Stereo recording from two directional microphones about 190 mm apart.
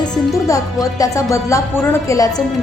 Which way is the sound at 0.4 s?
20° left (ahead or behind).